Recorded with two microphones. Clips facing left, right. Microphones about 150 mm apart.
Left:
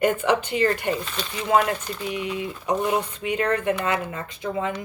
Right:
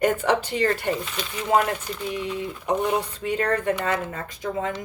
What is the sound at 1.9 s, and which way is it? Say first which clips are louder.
Speech: even; 15° left (ahead or behind).